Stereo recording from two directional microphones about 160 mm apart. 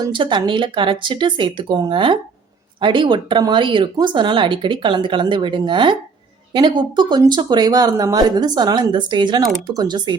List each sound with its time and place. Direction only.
0.0 s speech: 30° right (ahead or behind)